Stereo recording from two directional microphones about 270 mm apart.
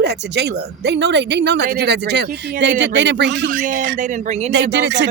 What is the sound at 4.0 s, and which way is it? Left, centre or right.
Speech, right.